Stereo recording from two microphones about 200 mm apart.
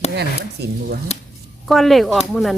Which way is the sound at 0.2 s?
55° right (ahead or behind).